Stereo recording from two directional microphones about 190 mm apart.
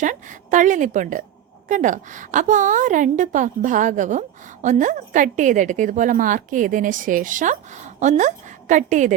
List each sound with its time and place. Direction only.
0.0 s a woman's voice: 40° right (ahead or behind)